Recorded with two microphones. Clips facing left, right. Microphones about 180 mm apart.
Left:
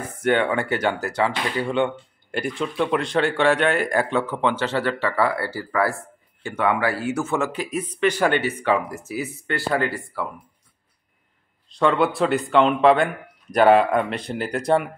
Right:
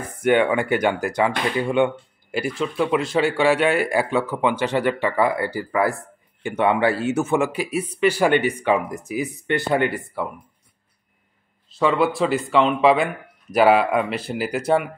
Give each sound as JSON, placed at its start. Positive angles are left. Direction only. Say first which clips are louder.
{"t": 0.0, "sound": "speech", "louder": "right 3 dB", "side_deg": -10}
{"t": 2.5, "sound": "speech", "louder": "right 1 dB", "side_deg": 0}
{"t": 11.7, "sound": "speech", "louder": "even", "side_deg": -5}